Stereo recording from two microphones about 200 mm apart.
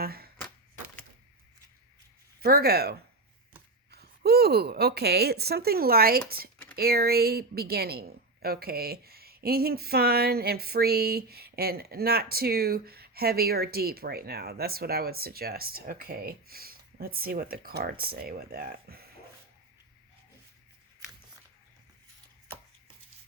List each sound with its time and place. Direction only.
0.0 s a sound: 50° right (ahead or behind)
2.4 s a woman's voice: 50° right (ahead or behind)
3.9 s a woman's voice: 50° right (ahead or behind)